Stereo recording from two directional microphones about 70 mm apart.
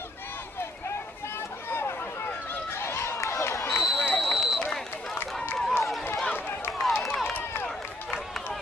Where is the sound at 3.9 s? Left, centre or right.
Left.